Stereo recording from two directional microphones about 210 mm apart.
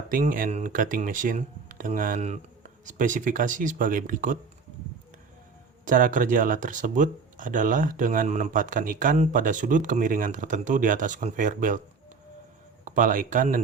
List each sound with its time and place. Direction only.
0.1 s speech: 40° right (ahead or behind)
5.8 s speech: 40° right (ahead or behind)
12.8 s speech: 40° right (ahead or behind)